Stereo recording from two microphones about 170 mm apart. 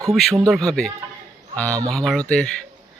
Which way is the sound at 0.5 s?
Centre (ahead or behind).